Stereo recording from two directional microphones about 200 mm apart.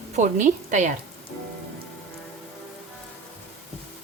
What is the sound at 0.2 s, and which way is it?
Speech, 40° right (ahead or behind).